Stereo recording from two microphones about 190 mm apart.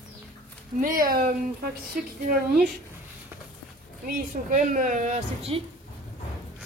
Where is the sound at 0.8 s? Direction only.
45° right (ahead or behind).